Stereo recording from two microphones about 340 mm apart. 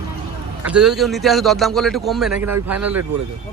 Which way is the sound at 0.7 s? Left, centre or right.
Centre.